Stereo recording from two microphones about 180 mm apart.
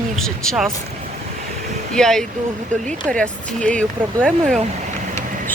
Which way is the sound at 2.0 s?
5° left (ahead or behind).